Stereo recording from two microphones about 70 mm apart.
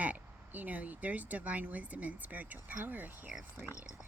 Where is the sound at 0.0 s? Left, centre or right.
Right.